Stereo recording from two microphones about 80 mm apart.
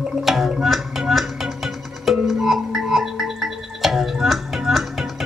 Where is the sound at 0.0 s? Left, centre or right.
Centre.